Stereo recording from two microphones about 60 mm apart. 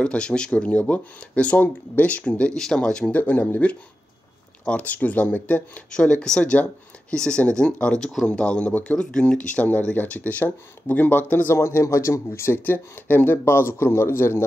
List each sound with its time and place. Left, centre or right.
0.0 s speech: centre
3.1 s speech: left
5.9 s speech: centre; by 11.5 s left
11.5 s speech: left
12.3 s speech: left